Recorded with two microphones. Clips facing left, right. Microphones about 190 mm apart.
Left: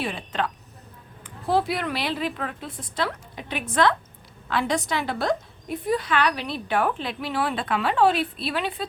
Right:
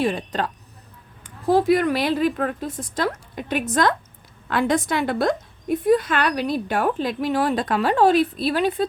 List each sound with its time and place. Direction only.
0.0 s a woman's voice: 40° right (ahead or behind)